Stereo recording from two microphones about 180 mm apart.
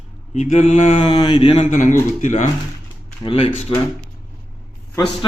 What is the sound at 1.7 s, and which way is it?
Speech, 45° left (ahead or behind).